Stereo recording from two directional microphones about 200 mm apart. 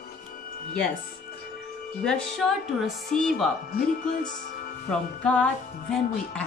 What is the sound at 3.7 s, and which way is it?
Speech, 40° left (ahead or behind).